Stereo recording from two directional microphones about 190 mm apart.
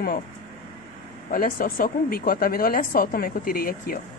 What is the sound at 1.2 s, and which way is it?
Speech, 50° left (ahead or behind).